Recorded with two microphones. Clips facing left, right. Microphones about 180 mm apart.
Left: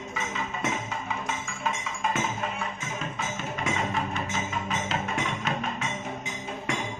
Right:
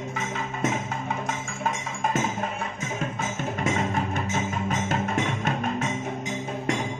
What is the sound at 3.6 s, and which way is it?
Music, 50° right (ahead or behind).